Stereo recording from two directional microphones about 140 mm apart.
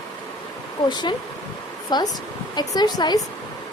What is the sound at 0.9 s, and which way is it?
A woman's voice, 35° left (ahead or behind).